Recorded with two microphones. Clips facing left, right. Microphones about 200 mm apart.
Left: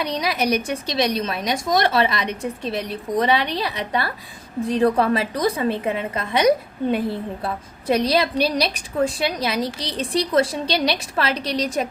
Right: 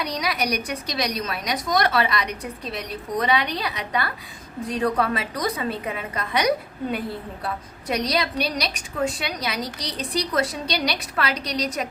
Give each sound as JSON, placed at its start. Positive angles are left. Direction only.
{"t": 0.0, "sound": "a woman's voice", "side_deg": 25}